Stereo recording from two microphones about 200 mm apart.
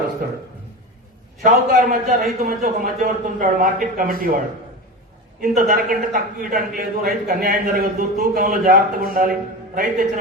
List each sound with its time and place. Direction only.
1.4 s a man's voice: 40° right (ahead or behind)
5.4 s a man's voice: 40° right (ahead or behind)